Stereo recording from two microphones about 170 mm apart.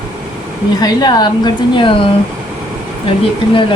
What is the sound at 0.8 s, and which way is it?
Speech, 25° left (ahead or behind).